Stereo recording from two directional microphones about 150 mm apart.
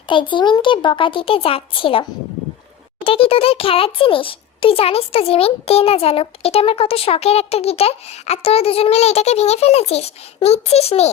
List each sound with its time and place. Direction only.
0.1 s a child's voice: 35° left (ahead or behind)